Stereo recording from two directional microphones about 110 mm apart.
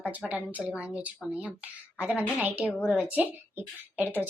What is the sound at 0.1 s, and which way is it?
Speech, 10° right (ahead or behind).